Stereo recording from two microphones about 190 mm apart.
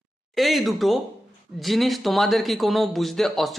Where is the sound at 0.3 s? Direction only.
Centre (ahead or behind).